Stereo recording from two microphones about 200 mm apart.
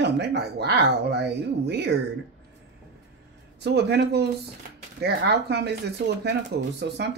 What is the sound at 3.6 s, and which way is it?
Speech, 55° right (ahead or behind).